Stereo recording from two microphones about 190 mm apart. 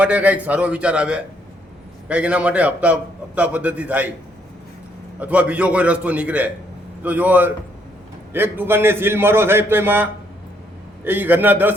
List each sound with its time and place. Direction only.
0.0 s a man's voice: 5° right (ahead or behind)
5.2 s a man's voice: 10° right (ahead or behind)